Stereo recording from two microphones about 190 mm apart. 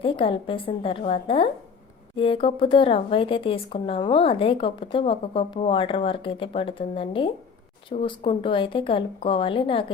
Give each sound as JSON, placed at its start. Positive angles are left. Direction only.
{"t": 0.0, "sound": "a woman's voice", "side_deg": 25}